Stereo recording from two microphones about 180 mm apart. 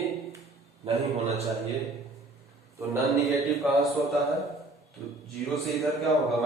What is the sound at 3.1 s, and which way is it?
A man's voice, centre (ahead or behind).